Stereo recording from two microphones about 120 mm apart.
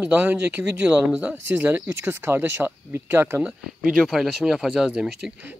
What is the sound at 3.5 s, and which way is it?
Speech, 5° right (ahead or behind).